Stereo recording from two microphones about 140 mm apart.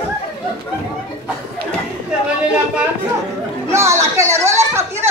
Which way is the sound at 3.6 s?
20° right (ahead or behind).